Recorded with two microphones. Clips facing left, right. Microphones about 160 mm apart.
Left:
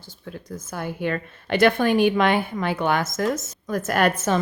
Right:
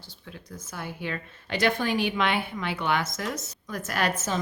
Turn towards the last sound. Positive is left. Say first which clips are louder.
# left 7 dB
turn(degrees=60)  # may be behind; listen again after turning